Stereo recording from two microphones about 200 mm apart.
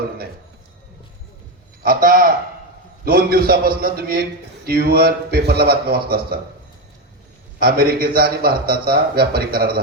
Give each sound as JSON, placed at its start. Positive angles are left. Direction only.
{"t": 1.8, "sound": "a man's voice", "side_deg": -45}
{"t": 7.6, "sound": "a man's voice", "side_deg": -50}